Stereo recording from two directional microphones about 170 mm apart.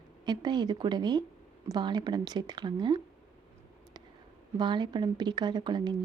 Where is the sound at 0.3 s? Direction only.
25° right (ahead or behind).